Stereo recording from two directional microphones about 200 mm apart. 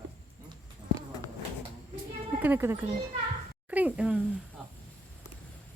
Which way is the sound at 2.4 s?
10° right (ahead or behind).